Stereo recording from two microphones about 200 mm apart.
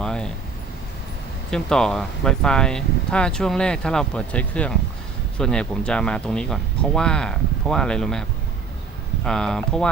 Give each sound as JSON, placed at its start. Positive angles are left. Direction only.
{"t": 0.0, "sound": "vehicle", "side_deg": 5}
{"t": 1.5, "sound": "speech", "side_deg": 5}
{"t": 9.2, "sound": "speech", "side_deg": 5}